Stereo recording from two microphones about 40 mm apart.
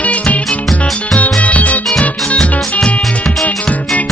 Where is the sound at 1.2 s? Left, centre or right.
Left.